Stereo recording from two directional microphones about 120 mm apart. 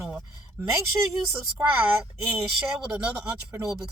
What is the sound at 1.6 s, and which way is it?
Speech, 15° right (ahead or behind).